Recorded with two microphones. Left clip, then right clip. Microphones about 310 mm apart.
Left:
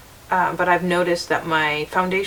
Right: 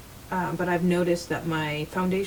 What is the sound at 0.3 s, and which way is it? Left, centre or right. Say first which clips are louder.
Speech: left 9 dB; centre.